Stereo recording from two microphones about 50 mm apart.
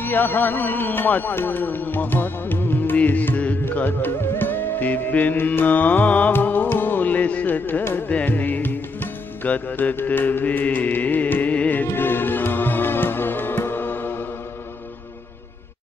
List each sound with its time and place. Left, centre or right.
0.0 s speech: left
3.1 s music: left
10.0 s speech: left
11.5 s music: left